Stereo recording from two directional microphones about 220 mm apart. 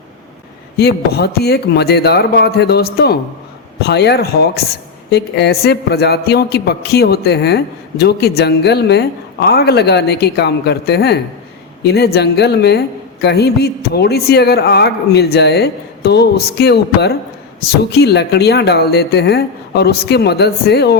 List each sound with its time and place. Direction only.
0.8 s speech: 45° left (ahead or behind)